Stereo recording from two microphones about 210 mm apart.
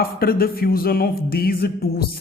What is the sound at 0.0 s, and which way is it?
Speech, 45° left (ahead or behind).